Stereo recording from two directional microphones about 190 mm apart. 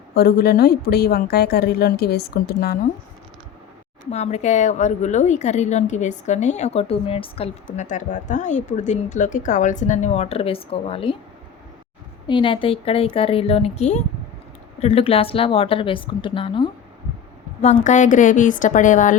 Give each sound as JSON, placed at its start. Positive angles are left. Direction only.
{"t": 0.1, "sound": "a woman's voice", "side_deg": 55}
{"t": 4.1, "sound": "a woman's voice", "side_deg": 35}
{"t": 12.3, "sound": "a woman's voice", "side_deg": 25}
{"t": 17.6, "sound": "a woman's voice", "side_deg": 40}